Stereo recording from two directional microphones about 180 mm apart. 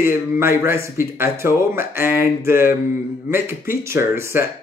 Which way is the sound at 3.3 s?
15° right (ahead or behind).